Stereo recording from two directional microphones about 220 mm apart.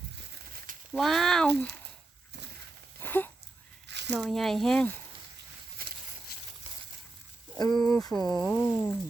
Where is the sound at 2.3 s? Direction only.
50° right (ahead or behind).